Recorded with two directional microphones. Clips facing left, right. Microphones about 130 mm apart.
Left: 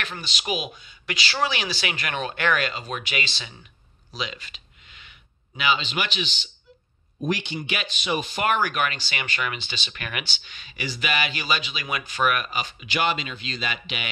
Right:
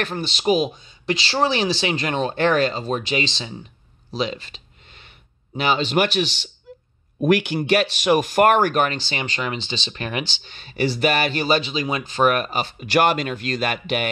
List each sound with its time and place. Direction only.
0.0 s speech: 40° right (ahead or behind)
4.1 s a sound: 35° right (ahead or behind)
5.6 s speech: 40° right (ahead or behind)
7.2 s a man's voice: 60° right (ahead or behind)
7.6 s speech: 40° right (ahead or behind)